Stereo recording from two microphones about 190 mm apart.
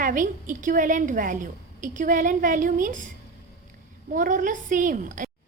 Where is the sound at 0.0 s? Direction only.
45° right (ahead or behind).